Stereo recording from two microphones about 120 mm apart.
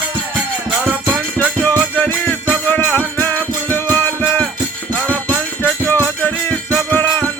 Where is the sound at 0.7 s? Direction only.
15° right (ahead or behind).